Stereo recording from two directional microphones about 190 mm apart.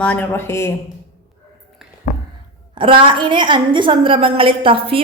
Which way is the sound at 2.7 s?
30° right (ahead or behind).